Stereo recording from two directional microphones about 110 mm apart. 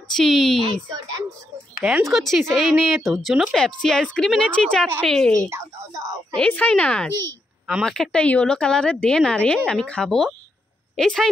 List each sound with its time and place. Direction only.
0.1 s speech: centre (ahead or behind)
5.5 s a sound: 30° right (ahead or behind)
6.3 s a woman's voice: 10° left (ahead or behind)